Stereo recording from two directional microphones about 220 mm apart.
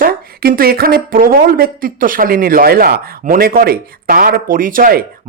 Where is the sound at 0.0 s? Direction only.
40° right (ahead or behind).